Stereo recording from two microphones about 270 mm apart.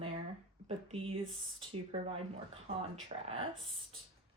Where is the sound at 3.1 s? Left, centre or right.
Right.